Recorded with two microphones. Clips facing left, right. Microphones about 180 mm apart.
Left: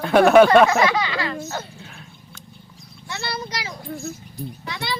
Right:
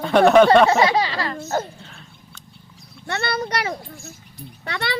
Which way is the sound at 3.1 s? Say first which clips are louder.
Right 6 dB; 60° right (ahead or behind).